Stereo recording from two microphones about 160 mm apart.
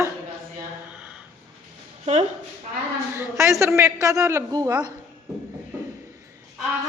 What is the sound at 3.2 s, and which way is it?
A man's voice, 20° right (ahead or behind).